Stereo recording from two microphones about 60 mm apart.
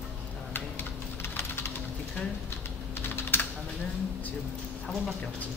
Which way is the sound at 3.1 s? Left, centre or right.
Left.